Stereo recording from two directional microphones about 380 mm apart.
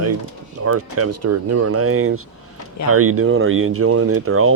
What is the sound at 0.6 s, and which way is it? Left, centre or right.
Speech, right.